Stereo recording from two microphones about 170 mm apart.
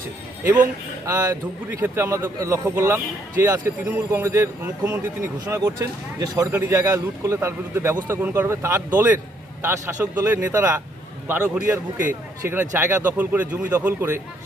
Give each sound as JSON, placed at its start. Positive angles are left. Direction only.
{"t": 1.0, "sound": "a man's voice", "side_deg": -20}